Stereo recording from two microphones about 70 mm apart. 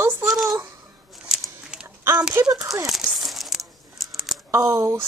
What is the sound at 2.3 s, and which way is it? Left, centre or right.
Speech, right.